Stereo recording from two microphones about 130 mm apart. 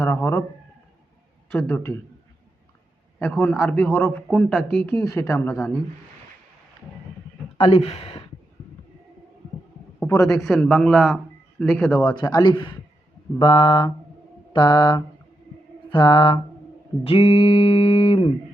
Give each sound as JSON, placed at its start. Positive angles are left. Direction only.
{"t": 0.0, "sound": "a man's voice", "side_deg": 20}
{"t": 1.5, "sound": "a man's voice", "side_deg": 15}
{"t": 3.2, "sound": "a man's voice", "side_deg": 10}
{"t": 5.0, "sound": "speech", "side_deg": 20}
{"t": 5.5, "sound": "a man's voice", "side_deg": 5}
{"t": 7.6, "sound": "a sound", "side_deg": 50}
{"t": 10.2, "sound": "a man's voice", "side_deg": 0}
{"t": 12.0, "sound": "a man's voice", "side_deg": 30}
{"t": 17.0, "sound": "a sound", "side_deg": 45}